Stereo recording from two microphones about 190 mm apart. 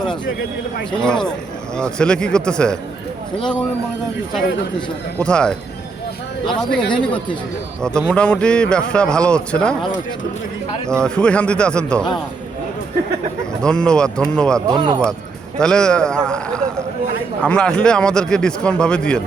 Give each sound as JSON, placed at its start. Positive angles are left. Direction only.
{"t": 1.0, "sound": "a man's voice", "side_deg": 5}
{"t": 5.2, "sound": "a man's voice", "side_deg": 5}
{"t": 11.0, "sound": "a man's voice", "side_deg": 5}
{"t": 13.6, "sound": "a man's voice", "side_deg": 5}
{"t": 14.7, "sound": "speech", "side_deg": -20}
{"t": 15.5, "sound": "a man's voice", "side_deg": 5}